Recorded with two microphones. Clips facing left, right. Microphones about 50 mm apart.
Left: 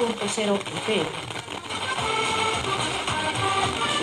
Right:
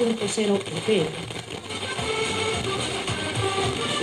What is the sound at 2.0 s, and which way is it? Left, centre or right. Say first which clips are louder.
Music: left 1 dB; left.